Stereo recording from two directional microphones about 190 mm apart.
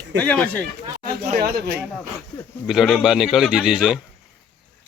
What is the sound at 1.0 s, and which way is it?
Speech, 50° right (ahead or behind).